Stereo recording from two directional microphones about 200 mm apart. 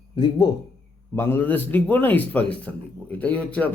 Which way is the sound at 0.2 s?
20° left (ahead or behind).